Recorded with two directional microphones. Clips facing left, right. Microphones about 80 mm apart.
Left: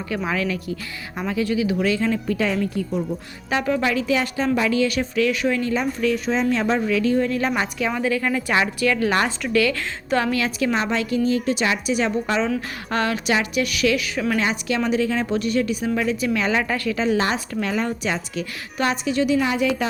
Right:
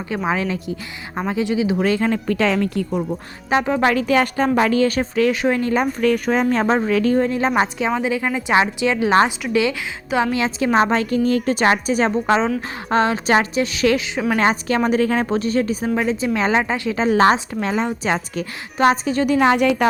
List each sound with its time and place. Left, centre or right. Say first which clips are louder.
0.1 s a woman's voice: right 3 dB; right
1.8 s speech: right 2 dB; right
3.5 s a woman's voice: right 3 dB; right
3.8 s a woman's voice: right 5 dB; right
7.3 s a woman's voice: right 4 dB; right
9.7 s a woman's voice: right 2 dB; centre
10.3 s a woman's voice: right 3 dB; right
10.8 s a woman's voice: right 5 dB; right
14.3 s a woman's voice: right 5 dB; right
15.4 s a woman's voice: right 2 dB; right
17.0 s a woman's voice: right 8 dB; right
17.3 s a woman's voice: right 3 dB; right
19.4 s speech: right 6 dB; right